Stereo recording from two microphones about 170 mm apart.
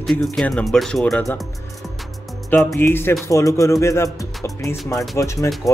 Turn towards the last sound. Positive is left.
turn(degrees=15)  # may be behind; listen again after turning